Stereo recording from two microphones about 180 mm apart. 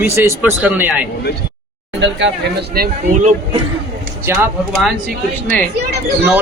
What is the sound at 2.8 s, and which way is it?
Speech, 55° right (ahead or behind).